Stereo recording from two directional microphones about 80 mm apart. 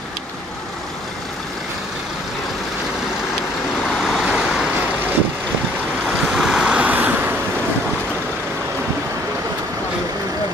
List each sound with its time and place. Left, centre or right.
4.0 s vehicle: centre
6.0 s waves: centre
6.6 s vehicle: centre